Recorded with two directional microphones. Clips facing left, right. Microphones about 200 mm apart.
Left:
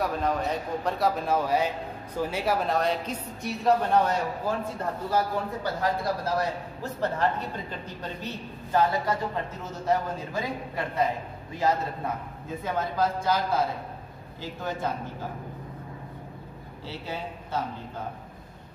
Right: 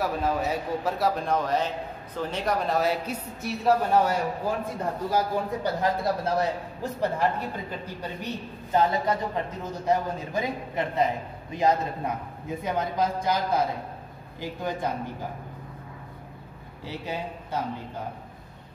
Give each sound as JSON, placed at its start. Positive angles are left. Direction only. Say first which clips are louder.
{"t": 0.0, "sound": "speech", "louder": "right 1 dB", "side_deg": -5}
{"t": 5.1, "sound": "a man's voice", "louder": "right 1 dB", "side_deg": -20}
{"t": 16.8, "sound": "a man's voice", "louder": "right 2 dB", "side_deg": -15}